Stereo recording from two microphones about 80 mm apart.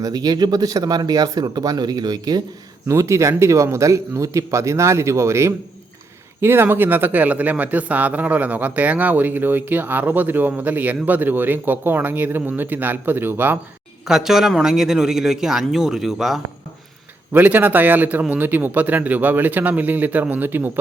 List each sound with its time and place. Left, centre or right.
0.0 s speech: right
2.8 s speech: right
14.1 s a man's voice: centre
17.3 s speech: right